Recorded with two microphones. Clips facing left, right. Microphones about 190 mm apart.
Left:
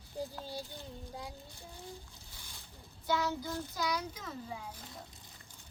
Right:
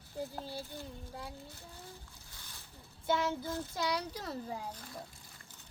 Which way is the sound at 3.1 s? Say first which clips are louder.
Right 1 dB; 25° right (ahead or behind).